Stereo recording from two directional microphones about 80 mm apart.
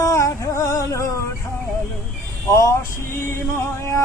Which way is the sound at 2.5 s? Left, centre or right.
Left.